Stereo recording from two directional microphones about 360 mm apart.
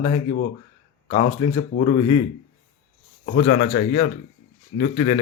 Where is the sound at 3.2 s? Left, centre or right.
Left.